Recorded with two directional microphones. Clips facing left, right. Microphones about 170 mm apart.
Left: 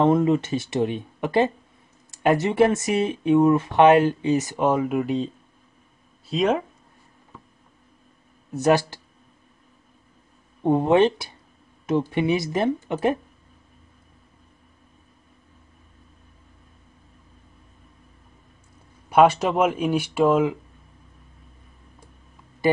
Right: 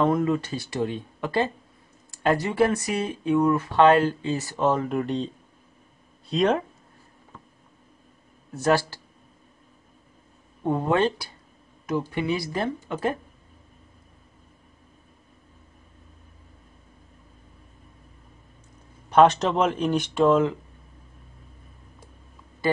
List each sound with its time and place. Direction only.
0.0 s speech: 25° left (ahead or behind); by 6.6 s 5° left (ahead or behind)
8.5 s speech: 20° left (ahead or behind)
10.6 s speech: 25° left (ahead or behind)
19.0 s speech: 10° left (ahead or behind)